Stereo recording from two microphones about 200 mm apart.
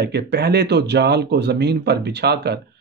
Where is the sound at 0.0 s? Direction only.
55° right (ahead or behind).